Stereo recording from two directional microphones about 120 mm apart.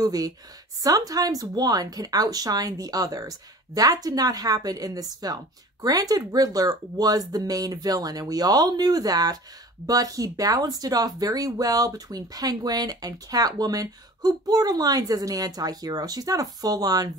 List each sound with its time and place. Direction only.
0.0 s speech: 30° right (ahead or behind)